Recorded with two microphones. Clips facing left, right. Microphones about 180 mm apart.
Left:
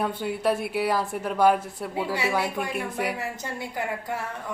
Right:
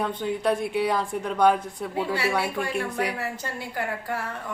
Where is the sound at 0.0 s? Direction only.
10° left (ahead or behind).